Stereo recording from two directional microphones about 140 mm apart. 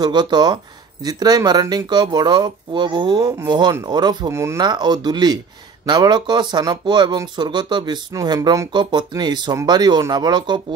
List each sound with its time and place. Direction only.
0.0 s speech: 30° right (ahead or behind)
4.3 s speech: 20° right (ahead or behind)
4.6 s speech: 30° right (ahead or behind)